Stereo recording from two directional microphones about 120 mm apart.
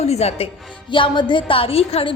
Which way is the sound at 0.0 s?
60° left (ahead or behind).